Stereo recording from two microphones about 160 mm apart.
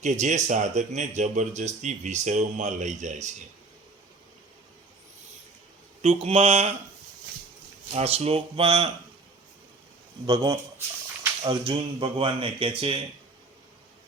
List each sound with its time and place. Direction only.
0.0 s speech: 50° right (ahead or behind)
6.0 s speech: 40° right (ahead or behind)
7.9 s speech: 40° right (ahead or behind)
10.2 s speech: 25° right (ahead or behind)
11.4 s speech: 30° right (ahead or behind)